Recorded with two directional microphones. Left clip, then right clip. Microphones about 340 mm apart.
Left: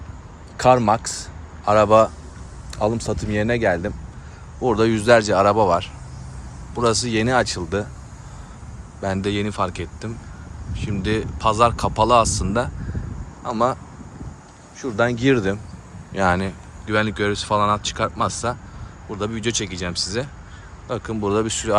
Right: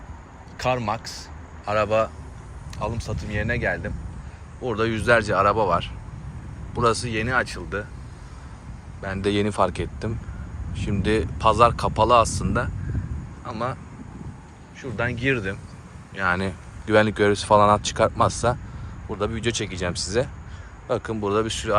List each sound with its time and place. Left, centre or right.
0.6 s speech: centre
9.0 s speech: centre
14.8 s speech: centre